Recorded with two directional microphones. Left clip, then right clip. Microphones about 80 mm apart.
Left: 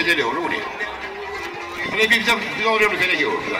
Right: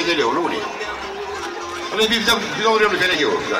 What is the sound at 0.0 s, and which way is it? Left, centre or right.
Speech, centre.